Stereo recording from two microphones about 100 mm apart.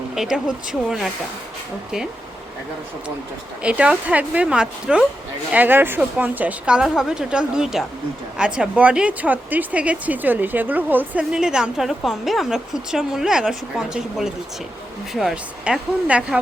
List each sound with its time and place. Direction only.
0.1 s speech: 5° right (ahead or behind)
3.6 s a woman's voice: 10° right (ahead or behind)